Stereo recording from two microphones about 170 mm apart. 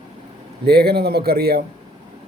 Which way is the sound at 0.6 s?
70° right (ahead or behind).